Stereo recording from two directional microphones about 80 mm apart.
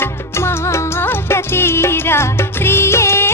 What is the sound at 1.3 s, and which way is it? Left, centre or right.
Music, left.